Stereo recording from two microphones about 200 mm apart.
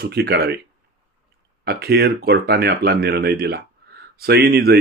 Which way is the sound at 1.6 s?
50° right (ahead or behind).